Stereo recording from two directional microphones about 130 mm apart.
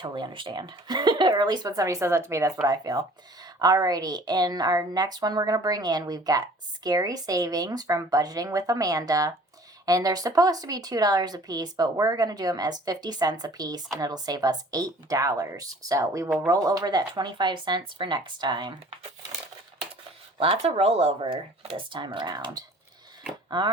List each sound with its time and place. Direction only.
0.0 s speech: 35° right (ahead or behind)
20.4 s speech: 50° right (ahead or behind); by 22.6 s 35° right (ahead or behind)